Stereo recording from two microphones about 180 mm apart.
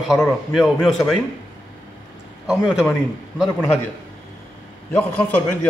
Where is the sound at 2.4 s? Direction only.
5° right (ahead or behind).